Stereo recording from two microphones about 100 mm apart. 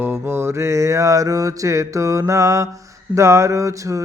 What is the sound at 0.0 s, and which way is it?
Mantra, 25° right (ahead or behind).